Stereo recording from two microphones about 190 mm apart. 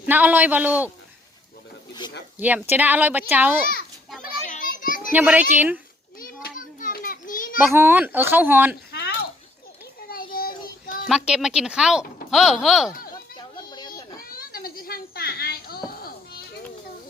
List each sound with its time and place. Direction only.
0.0 s speech: 10° right (ahead or behind)
2.4 s speech: 10° right (ahead or behind)
4.4 s children playing: 45° left (ahead or behind)
5.1 s speech: 10° right (ahead or behind)
6.1 s children playing: 45° left (ahead or behind)
7.7 s speech: 10° right (ahead or behind)
8.9 s a sound: 60° left (ahead or behind)
11.1 s speech: 5° right (ahead or behind)
13.3 s children playing: 20° left (ahead or behind)
14.2 s a sound: 50° left (ahead or behind)